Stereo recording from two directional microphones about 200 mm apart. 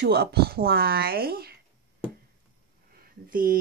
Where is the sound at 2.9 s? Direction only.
45° right (ahead or behind).